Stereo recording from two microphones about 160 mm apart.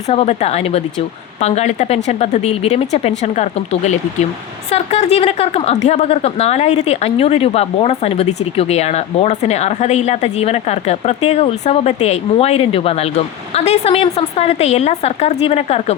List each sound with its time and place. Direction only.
0.1 s a woman's voice: 40° left (ahead or behind)